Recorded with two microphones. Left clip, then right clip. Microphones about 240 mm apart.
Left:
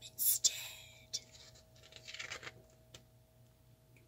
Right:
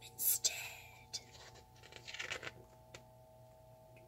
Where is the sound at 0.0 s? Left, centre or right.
Centre.